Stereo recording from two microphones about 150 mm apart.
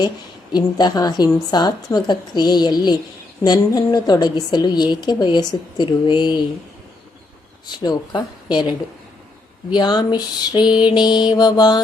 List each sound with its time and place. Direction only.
0.5 s a woman's voice: 30° left (ahead or behind)
7.8 s a woman's voice: 25° left (ahead or behind)
9.7 s a woman's voice: 30° left (ahead or behind)